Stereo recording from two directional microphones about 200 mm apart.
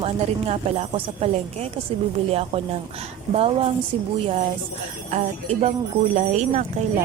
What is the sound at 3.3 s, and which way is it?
Speech, 30° right (ahead or behind).